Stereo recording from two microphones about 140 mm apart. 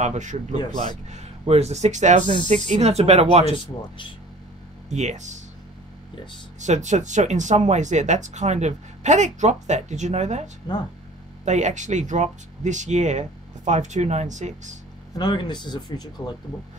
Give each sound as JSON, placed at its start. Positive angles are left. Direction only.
{"t": 0.0, "sound": "speech", "side_deg": -60}
{"t": 4.8, "sound": "speech", "side_deg": -55}
{"t": 6.6, "sound": "speech", "side_deg": -60}
{"t": 15.1, "sound": "speech", "side_deg": 30}